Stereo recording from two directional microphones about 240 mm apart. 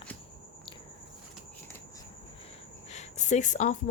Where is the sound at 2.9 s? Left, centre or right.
Left.